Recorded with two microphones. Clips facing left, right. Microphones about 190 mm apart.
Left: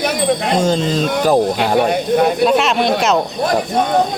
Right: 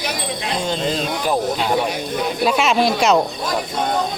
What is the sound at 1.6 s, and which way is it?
Speech, 60° left (ahead or behind).